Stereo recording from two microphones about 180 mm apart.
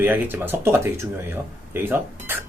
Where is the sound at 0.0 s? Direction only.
10° right (ahead or behind).